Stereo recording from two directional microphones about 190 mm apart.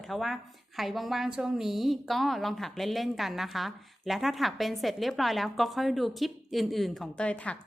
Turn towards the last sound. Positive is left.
turn(degrees=5)  # may be behind; listen again after turning